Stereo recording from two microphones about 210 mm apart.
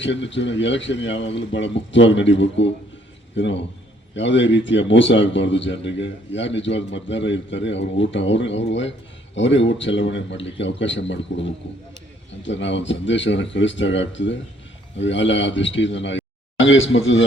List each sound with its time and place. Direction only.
0.0 s a man's voice: 60° left (ahead or behind)